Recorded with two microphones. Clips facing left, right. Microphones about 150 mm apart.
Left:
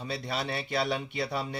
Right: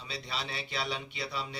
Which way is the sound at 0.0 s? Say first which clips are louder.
Left 6 dB; 50° left (ahead or behind).